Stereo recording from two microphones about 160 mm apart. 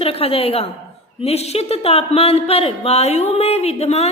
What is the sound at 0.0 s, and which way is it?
A woman's voice, 35° left (ahead or behind).